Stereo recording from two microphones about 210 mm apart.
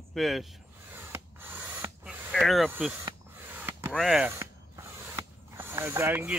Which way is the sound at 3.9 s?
Centre (ahead or behind).